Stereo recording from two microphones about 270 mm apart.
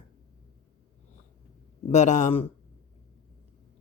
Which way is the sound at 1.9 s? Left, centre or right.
Left.